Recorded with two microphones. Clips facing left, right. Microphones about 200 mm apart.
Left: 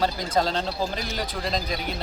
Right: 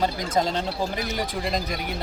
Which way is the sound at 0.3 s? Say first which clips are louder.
Even; 15° right (ahead or behind).